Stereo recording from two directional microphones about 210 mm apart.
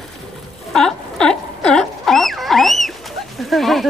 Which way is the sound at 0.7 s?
5° left (ahead or behind).